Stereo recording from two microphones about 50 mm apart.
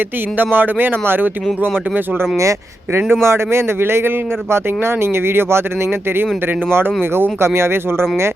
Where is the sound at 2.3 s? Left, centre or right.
Right.